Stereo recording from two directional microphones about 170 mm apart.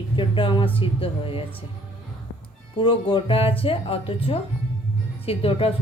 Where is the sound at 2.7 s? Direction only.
30° left (ahead or behind).